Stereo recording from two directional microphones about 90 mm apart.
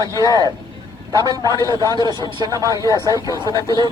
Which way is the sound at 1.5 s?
35° left (ahead or behind).